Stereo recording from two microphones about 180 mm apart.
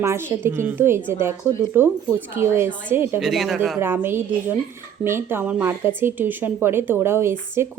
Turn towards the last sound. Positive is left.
turn(degrees=-15)  # may be behind; listen again after turning